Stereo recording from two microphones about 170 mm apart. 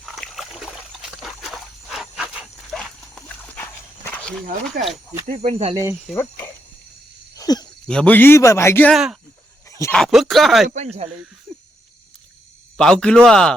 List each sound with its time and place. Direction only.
0.0 s a sound: centre (ahead or behind)
4.8 s speech: 60° right (ahead or behind)
5.2 s speech: 45° right (ahead or behind)
6.0 s speech: 5° left (ahead or behind)
7.3 s a sound: 20° left (ahead or behind)
7.9 s a man's voice: 5° left (ahead or behind)
8.9 s speech: 5° right (ahead or behind)
9.6 s a sound: 15° left (ahead or behind)
9.9 s speech: centre (ahead or behind)
10.8 s speech: 40° right (ahead or behind)
12.7 s speech: 5° left (ahead or behind)